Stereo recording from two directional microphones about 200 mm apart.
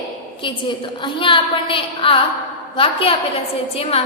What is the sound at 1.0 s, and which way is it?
A woman's voice, 25° left (ahead or behind).